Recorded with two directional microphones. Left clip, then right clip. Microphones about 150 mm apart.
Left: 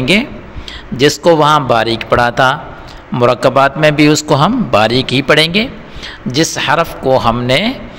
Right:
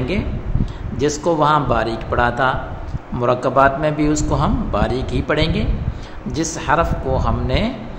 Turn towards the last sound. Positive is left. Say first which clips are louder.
# left 9 dB
turn(degrees=55)  # may be behind; listen again after turning